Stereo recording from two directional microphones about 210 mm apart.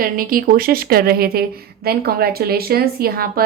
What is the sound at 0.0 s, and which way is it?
A woman's voice, 45° right (ahead or behind).